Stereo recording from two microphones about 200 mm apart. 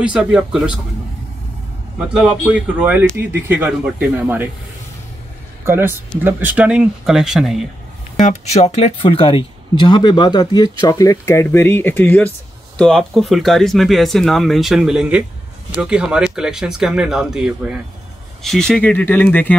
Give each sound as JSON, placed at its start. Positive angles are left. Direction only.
{"t": 0.0, "sound": "speech", "side_deg": -5}
{"t": 2.0, "sound": "speech", "side_deg": -5}
{"t": 5.7, "sound": "speech", "side_deg": -10}
{"t": 8.2, "sound": "speech", "side_deg": 35}